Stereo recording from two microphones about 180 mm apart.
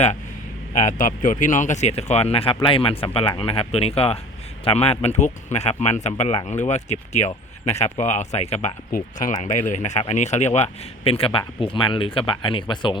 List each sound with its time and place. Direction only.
0.8 s speech: 45° left (ahead or behind); by 13.0 s 25° left (ahead or behind)